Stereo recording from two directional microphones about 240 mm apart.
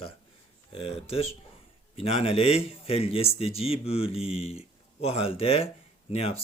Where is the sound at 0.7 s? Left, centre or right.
Left.